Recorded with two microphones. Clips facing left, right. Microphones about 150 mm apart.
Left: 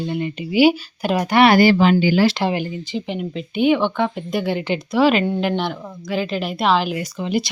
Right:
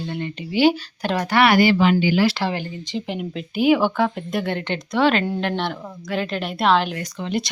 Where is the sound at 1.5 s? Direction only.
35° left (ahead or behind).